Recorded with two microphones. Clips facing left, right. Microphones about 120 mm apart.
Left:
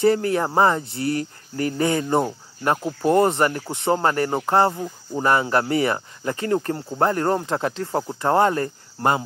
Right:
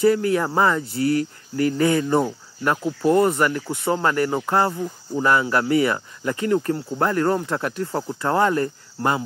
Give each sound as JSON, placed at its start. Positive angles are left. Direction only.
{"t": 0.0, "sound": "speech", "side_deg": 35}
{"t": 3.3, "sound": "speech", "side_deg": 25}